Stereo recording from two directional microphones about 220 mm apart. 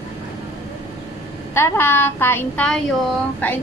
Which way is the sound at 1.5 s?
10° left (ahead or behind).